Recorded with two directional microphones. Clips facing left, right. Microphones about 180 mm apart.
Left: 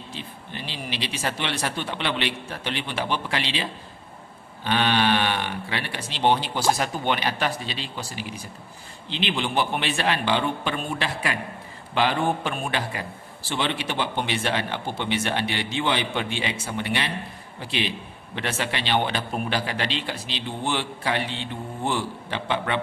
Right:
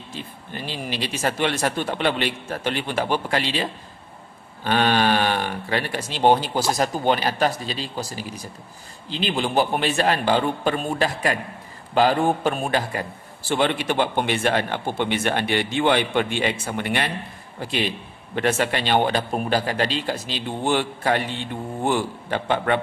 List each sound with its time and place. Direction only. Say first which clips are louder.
0.1 s a man's voice: right 4 dB; 45° right (ahead or behind)
4.6 s a man's voice: right 2 dB; 45° right (ahead or behind)